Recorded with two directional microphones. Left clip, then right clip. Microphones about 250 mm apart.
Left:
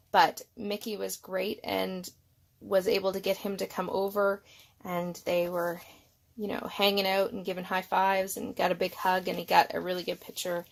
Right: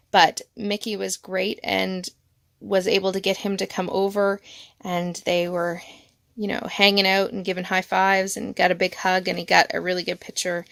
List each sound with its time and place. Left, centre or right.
0.1 s speech: right